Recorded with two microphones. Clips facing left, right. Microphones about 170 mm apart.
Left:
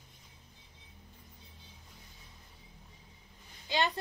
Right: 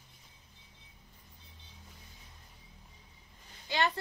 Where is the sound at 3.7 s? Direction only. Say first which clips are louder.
Even; 15° left (ahead or behind).